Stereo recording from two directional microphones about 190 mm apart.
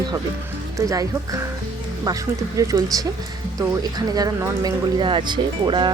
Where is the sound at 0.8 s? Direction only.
15° right (ahead or behind).